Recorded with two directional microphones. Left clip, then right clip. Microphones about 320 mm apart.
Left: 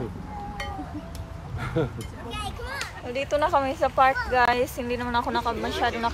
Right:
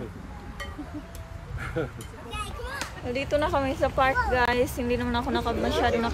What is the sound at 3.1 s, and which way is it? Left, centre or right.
A woman's voice, centre.